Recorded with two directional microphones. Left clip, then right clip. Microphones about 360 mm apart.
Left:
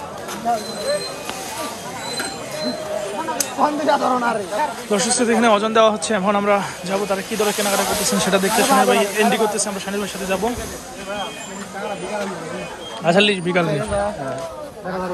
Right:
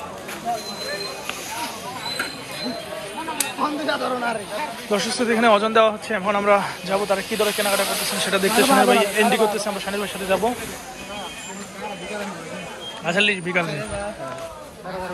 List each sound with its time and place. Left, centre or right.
3.6 s speech: left
4.9 s a man's voice: centre
13.0 s a man's voice: centre